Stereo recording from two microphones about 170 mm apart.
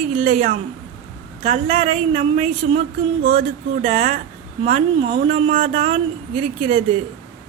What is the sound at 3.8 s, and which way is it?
Speech, 45° right (ahead or behind).